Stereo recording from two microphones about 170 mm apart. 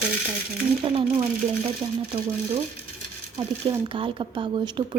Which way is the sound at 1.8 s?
20° right (ahead or behind).